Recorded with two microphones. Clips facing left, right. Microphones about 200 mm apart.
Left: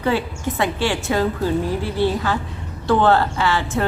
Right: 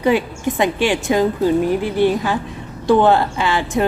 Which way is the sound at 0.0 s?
15° right (ahead or behind).